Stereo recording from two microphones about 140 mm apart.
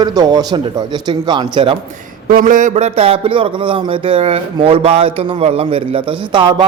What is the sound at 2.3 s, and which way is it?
A man's voice, 75° right (ahead or behind).